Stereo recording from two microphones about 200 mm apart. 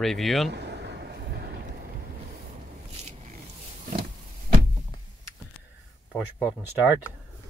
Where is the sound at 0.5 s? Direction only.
55° right (ahead or behind).